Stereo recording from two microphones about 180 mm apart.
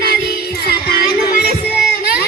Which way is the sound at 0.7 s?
60° left (ahead or behind).